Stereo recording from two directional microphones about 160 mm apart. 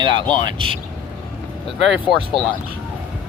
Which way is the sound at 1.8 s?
Centre (ahead or behind).